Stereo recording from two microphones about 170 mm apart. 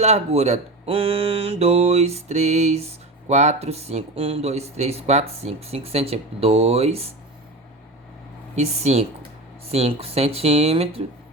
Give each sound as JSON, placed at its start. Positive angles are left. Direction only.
{"t": 0.0, "sound": "speech", "side_deg": -40}
{"t": 8.5, "sound": "speech", "side_deg": -40}